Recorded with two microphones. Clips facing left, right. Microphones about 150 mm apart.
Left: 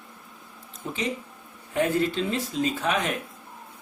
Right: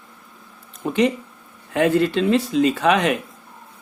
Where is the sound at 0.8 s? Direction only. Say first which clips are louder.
Right 11 dB; 65° right (ahead or behind).